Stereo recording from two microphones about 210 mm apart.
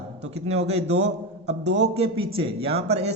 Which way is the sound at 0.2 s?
30° right (ahead or behind).